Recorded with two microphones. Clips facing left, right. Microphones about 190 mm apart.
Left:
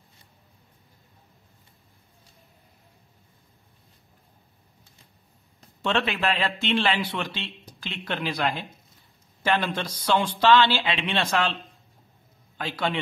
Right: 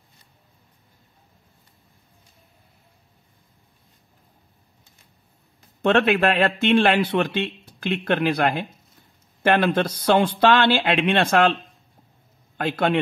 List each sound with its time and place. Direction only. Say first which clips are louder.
5.8 s speech: right 8 dB; 55° right (ahead or behind)
12.5 s speech: right 7 dB; 55° right (ahead or behind)